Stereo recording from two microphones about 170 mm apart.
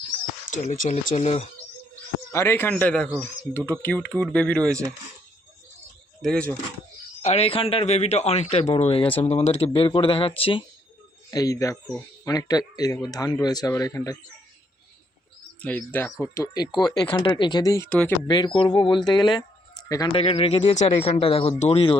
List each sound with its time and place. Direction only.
0.5 s speech: 50° left (ahead or behind)
2.3 s speech: 15° left (ahead or behind)
6.2 s speech: 5° left (ahead or behind)
7.2 s speech: 40° left (ahead or behind)
11.3 s speech: 20° left (ahead or behind)
15.6 s speech: 10° left (ahead or behind)
17.8 s speech: 5° left (ahead or behind)
18.3 s speech: 25° left (ahead or behind)
20.2 s speech: 35° left (ahead or behind)